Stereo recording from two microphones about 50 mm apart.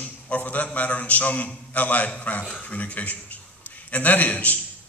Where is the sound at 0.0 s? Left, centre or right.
Left.